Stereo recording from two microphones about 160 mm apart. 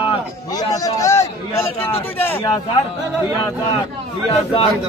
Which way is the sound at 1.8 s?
35° left (ahead or behind).